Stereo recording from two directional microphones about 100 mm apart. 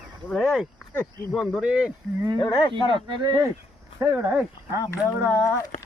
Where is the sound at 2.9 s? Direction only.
50° right (ahead or behind).